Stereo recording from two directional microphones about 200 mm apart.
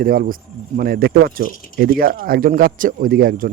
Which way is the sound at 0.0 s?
45° right (ahead or behind).